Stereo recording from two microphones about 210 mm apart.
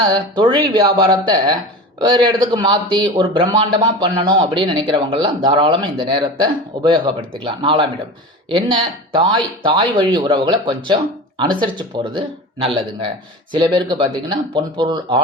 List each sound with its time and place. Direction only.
0.0 s speech: 20° right (ahead or behind)